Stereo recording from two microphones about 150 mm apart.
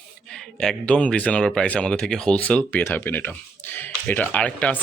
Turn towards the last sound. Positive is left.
turn(degrees=10)  # may be behind; listen again after turning